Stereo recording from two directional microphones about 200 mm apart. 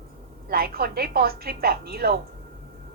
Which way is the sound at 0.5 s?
50° right (ahead or behind).